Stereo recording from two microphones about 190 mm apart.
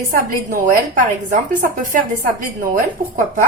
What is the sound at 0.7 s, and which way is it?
A woman's voice, 45° right (ahead or behind).